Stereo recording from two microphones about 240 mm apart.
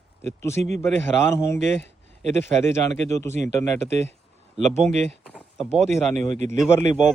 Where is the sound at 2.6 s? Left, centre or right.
Centre.